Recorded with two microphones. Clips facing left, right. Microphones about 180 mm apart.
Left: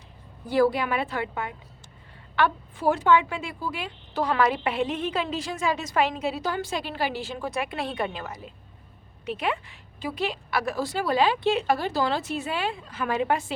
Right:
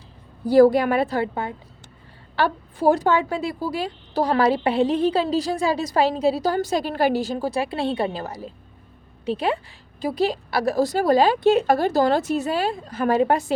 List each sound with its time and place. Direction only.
0.4 s a woman's voice: 40° right (ahead or behind)